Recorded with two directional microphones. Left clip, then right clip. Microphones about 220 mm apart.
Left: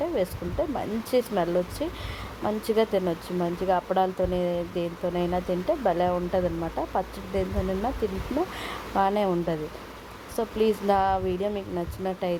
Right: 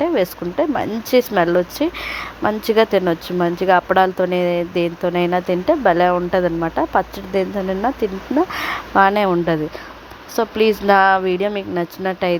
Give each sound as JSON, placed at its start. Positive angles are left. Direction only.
{"t": 0.0, "sound": "speech", "side_deg": -15}